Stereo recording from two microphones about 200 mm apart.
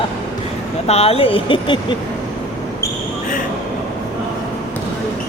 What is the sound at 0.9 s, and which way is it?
Speech, 30° left (ahead or behind).